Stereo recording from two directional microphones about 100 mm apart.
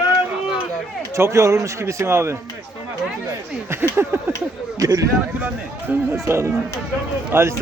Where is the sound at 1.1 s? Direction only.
30° right (ahead or behind).